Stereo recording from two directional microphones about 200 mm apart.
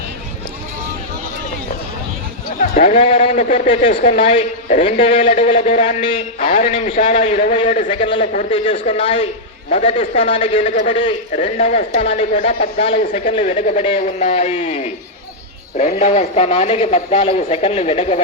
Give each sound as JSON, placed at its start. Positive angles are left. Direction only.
{"t": 2.6, "sound": "speech", "side_deg": 30}
{"t": 6.0, "sound": "speech", "side_deg": 25}
{"t": 6.5, "sound": "a man's voice", "side_deg": 35}
{"t": 7.9, "sound": "speech", "side_deg": 25}
{"t": 8.2, "sound": "a man's voice", "side_deg": 40}
{"t": 8.4, "sound": "speech", "side_deg": 25}
{"t": 11.3, "sound": "a man's voice", "side_deg": 35}
{"t": 13.0, "sound": "a man's voice", "side_deg": 40}
{"t": 16.0, "sound": "a man's voice", "side_deg": 35}